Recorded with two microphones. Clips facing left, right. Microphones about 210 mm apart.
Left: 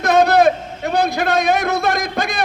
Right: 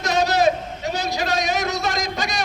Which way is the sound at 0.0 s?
55° left (ahead or behind).